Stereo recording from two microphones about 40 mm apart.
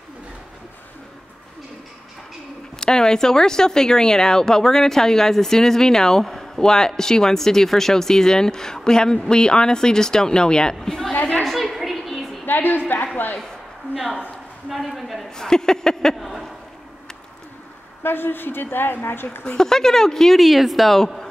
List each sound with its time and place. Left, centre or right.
2.8 s speech: centre
11.4 s a sound: centre
12.4 s a woman's voice: left
14.7 s a woman's voice: centre
15.3 s speech: centre
16.2 s speech: centre
18.0 s a woman's voice: left
19.4 s speech: centre